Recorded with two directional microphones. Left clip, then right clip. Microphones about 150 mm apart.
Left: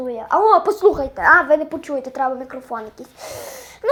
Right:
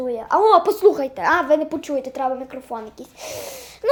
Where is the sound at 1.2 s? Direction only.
25° right (ahead or behind).